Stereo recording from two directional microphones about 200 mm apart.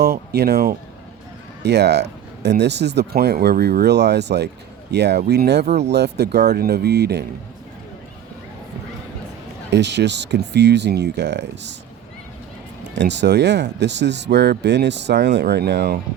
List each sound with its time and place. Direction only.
0.0 s speech: 55° right (ahead or behind)
9.6 s speech: 60° right (ahead or behind)
13.0 s speech: 60° right (ahead or behind)